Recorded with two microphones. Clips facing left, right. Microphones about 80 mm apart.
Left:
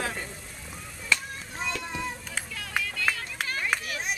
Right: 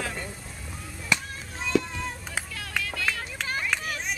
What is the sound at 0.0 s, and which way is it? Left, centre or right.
Music, centre.